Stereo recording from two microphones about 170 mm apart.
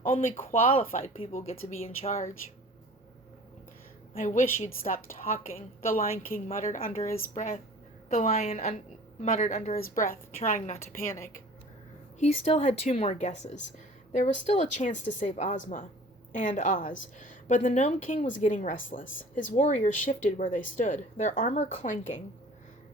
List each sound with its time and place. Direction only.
0.0 s speech: 55° left (ahead or behind)
0.9 s a woman's voice: 35° left (ahead or behind)
4.1 s a woman's voice: 50° left (ahead or behind)
9.8 s speech: 55° left (ahead or behind)
11.0 s speech: 15° left (ahead or behind)
12.2 s a woman's voice: 40° left (ahead or behind)